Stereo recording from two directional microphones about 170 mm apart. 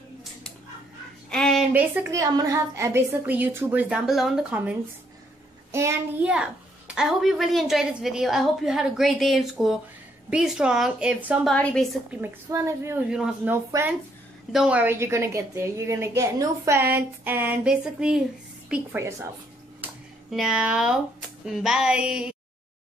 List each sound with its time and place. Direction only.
1.3 s a sound: 5° left (ahead or behind)
1.7 s a woman's voice: 10° right (ahead or behind)
7.0 s a woman's voice: 5° right (ahead or behind)
11.5 s a woman's voice: 5° left (ahead or behind)
12.1 s a woman's voice: 15° right (ahead or behind)
13.1 s a woman's voice: 5° right (ahead or behind)
19.8 s a sound: 5° right (ahead or behind)
21.5 s a woman's voice: 5° right (ahead or behind)